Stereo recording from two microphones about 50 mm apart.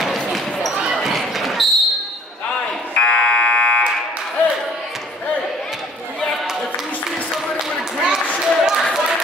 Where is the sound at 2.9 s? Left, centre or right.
Left.